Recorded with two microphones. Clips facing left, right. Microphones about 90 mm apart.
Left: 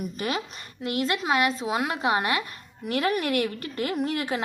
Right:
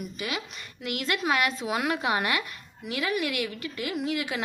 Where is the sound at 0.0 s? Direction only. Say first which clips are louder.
Left 4 dB; 40° left (ahead or behind).